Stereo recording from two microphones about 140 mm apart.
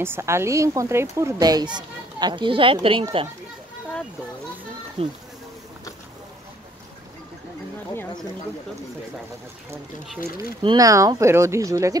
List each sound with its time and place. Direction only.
0.0 s speech: 20° right (ahead or behind); by 3.3 s 40° right (ahead or behind)
5.0 s speech: 45° right (ahead or behind)
10.6 s speech: 30° right (ahead or behind)